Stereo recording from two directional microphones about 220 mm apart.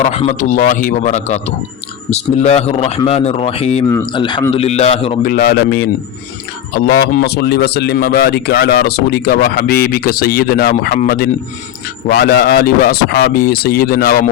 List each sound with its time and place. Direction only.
0.0 s a man's voice: 30° left (ahead or behind)
3.8 s speech: 15° left (ahead or behind)
5.3 s a man's voice: 45° left (ahead or behind)